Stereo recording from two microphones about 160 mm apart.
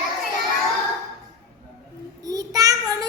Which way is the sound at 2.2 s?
20° right (ahead or behind).